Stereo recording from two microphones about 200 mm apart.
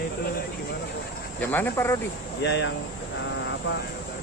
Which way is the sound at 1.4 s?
10° left (ahead or behind).